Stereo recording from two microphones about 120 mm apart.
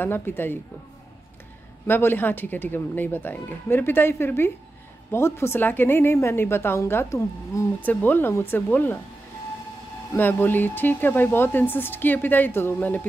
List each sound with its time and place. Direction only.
0.0 s speech: 15° left (ahead or behind)
1.9 s a woman's voice: 15° left (ahead or behind)
10.1 s speech: 15° left (ahead or behind)